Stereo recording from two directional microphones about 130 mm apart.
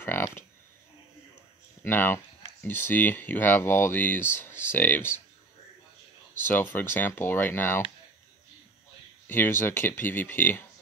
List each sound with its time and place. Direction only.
0.0 s speech: 15° left (ahead or behind)
1.8 s speech: 15° left (ahead or behind)
6.4 s speech: 15° left (ahead or behind)
9.3 s speech: 15° left (ahead or behind)